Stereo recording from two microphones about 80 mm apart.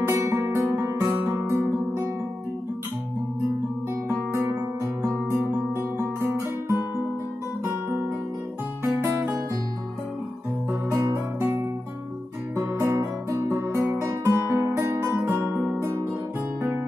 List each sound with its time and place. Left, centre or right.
0.0 s guitar: right
4.1 s guitar: right
6.7 s music: right
8.8 s music: right
12.5 s guitar: right